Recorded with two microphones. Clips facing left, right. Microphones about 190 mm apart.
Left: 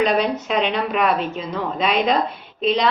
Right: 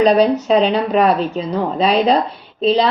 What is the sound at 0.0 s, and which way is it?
Speech, 35° right (ahead or behind).